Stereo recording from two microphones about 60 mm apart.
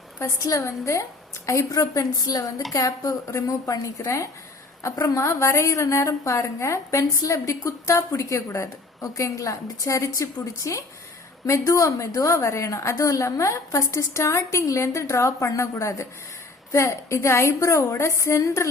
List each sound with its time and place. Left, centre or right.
0.2 s a woman's voice: left
1.7 s a woman's voice: left
2.7 s a woman's voice: left